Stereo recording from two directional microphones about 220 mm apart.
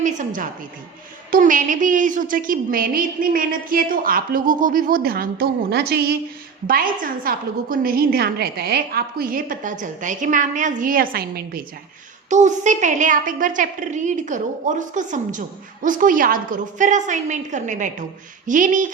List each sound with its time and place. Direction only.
0.0 s a sound: 35° right (ahead or behind)
1.3 s a woman's voice: 35° right (ahead or behind)
12.3 s a woman's voice: 35° right (ahead or behind)